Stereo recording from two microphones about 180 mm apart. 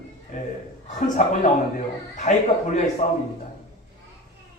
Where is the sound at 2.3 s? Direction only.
45° left (ahead or behind).